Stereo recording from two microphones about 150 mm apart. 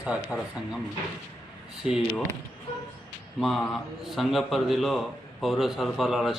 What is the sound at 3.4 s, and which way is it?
A man's voice, centre (ahead or behind).